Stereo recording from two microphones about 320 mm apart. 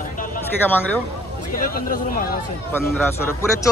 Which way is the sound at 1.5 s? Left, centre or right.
Left.